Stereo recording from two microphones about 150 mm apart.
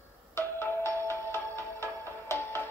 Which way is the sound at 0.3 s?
15° left (ahead or behind).